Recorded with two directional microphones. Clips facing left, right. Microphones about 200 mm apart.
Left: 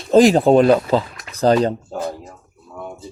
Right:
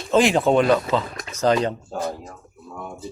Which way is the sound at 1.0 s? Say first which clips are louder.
Right 5 dB; 40° right (ahead or behind).